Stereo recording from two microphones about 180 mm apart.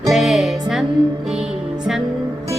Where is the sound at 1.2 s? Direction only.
5° right (ahead or behind).